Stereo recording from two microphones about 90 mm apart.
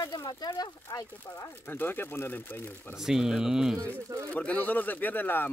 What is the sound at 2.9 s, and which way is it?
Speech, 5° right (ahead or behind).